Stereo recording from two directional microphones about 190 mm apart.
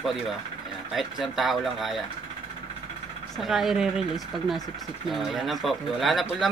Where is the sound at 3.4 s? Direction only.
Centre (ahead or behind).